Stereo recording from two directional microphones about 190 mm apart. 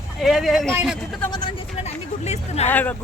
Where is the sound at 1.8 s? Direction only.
35° left (ahead or behind).